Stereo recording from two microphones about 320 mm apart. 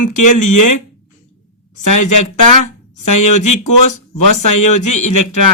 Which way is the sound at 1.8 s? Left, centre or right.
Left.